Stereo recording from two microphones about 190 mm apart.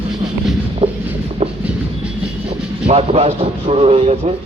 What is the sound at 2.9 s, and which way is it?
Speech, 35° right (ahead or behind).